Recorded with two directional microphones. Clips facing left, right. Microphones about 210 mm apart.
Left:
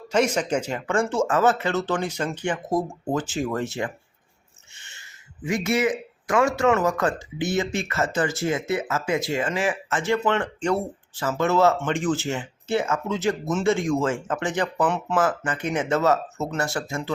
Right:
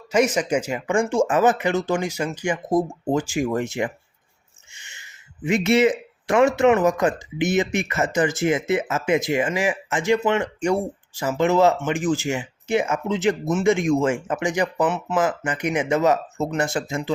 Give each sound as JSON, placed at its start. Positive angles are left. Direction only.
{"t": 0.1, "sound": "speech", "side_deg": -10}